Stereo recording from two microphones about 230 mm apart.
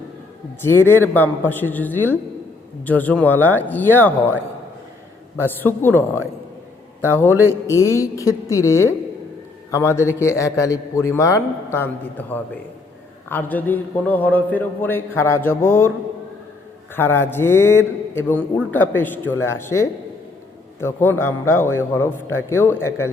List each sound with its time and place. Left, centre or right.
1.1 s a man's voice: centre
5.4 s a man's voice: centre
16.9 s a man's voice: centre